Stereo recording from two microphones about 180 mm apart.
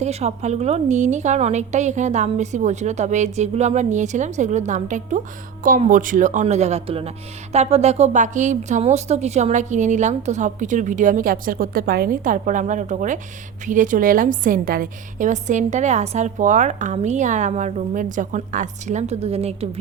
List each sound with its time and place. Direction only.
0.0 s a woman's voice: 35° right (ahead or behind)